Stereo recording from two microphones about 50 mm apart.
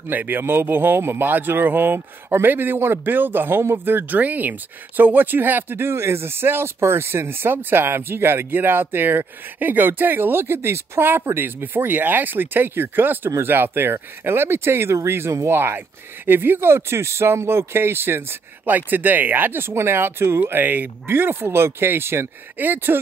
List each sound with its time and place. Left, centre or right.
0.1 s speech: right
4.2 s speech: right
18.7 s speech: right
22.6 s speech: right